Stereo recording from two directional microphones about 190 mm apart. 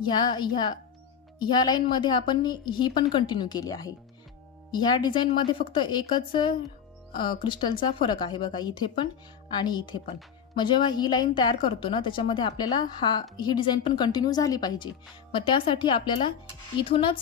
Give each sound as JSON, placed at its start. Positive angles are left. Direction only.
{"t": 1.4, "sound": "a woman's voice", "side_deg": 20}